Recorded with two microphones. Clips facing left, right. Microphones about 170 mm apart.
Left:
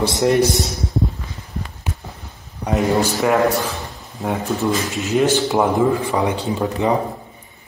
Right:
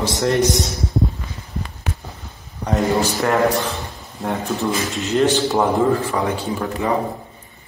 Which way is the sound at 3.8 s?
Centre (ahead or behind).